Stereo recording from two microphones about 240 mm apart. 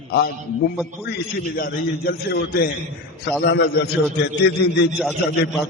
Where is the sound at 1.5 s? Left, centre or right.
Left.